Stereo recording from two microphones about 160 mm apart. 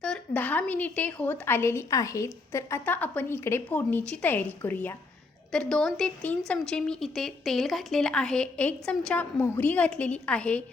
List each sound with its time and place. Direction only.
0.0 s a woman's voice: 5° left (ahead or behind)